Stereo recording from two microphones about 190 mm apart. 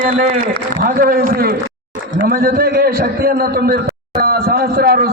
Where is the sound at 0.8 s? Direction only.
45° right (ahead or behind).